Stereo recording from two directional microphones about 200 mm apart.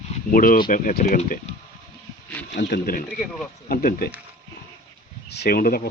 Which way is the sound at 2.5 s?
50° left (ahead or behind).